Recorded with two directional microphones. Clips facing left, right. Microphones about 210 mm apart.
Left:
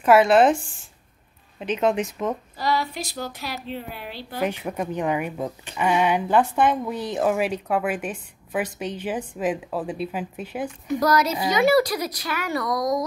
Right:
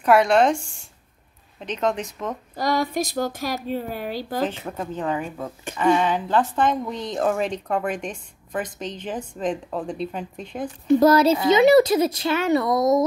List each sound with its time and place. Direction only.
0.0 s a woman's voice: centre (ahead or behind)
1.6 s a woman's voice: 10° left (ahead or behind)
2.5 s speech: 50° right (ahead or behind)
4.4 s a woman's voice: 15° left (ahead or behind)
10.9 s speech: 30° right (ahead or behind)